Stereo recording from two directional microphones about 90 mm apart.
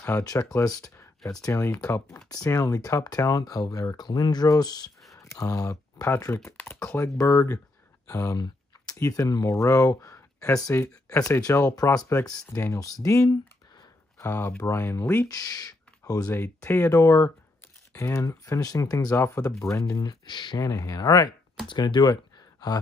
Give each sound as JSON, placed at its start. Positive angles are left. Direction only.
{"t": 0.2, "sound": "speech", "side_deg": 40}
{"t": 1.4, "sound": "speech", "side_deg": 30}
{"t": 5.1, "sound": "speech", "side_deg": 35}
{"t": 12.5, "sound": "speech", "side_deg": 35}
{"t": 15.2, "sound": "speech", "side_deg": 45}
{"t": 16.6, "sound": "speech", "side_deg": 20}
{"t": 16.9, "sound": "speech", "side_deg": 40}
{"t": 20.2, "sound": "speech", "side_deg": 55}
{"t": 20.5, "sound": "speech", "side_deg": 40}
{"t": 21.6, "sound": "speech", "side_deg": 55}